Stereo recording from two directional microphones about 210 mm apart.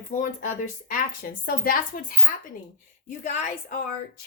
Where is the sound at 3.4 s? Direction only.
40° left (ahead or behind).